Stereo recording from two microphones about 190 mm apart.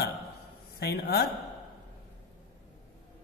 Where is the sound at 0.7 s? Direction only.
55° left (ahead or behind).